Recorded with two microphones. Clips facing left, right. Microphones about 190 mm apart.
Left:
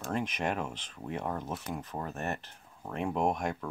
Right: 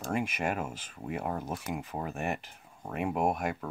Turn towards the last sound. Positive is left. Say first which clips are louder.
# right 1 dB
turn(degrees=-5)  # may be behind; listen again after turning